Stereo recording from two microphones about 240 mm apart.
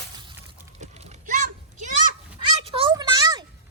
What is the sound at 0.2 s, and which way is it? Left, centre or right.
Children playing, centre.